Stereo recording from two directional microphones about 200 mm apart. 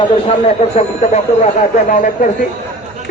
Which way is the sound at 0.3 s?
30° left (ahead or behind).